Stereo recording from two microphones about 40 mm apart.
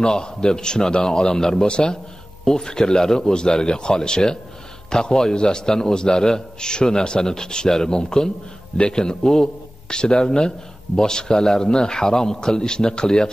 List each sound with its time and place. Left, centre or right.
0.0 s a man's voice: centre
8.7 s a man's voice: left
9.0 s a man's voice: centre